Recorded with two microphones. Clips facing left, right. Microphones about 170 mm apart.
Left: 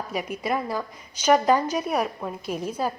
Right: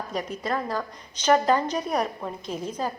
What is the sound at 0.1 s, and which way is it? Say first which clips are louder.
A woman's voice: left 2 dB; 10° left (ahead or behind).